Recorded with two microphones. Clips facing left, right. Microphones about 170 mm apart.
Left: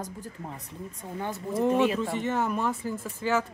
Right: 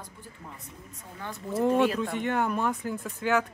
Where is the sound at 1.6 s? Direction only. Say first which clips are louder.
Even; 5° left (ahead or behind).